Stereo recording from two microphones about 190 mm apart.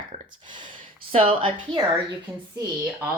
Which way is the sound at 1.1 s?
30° right (ahead or behind).